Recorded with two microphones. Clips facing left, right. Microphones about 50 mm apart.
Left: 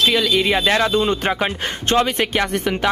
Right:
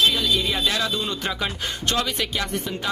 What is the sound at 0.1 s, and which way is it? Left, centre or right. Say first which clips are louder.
Speech: left 6 dB; left.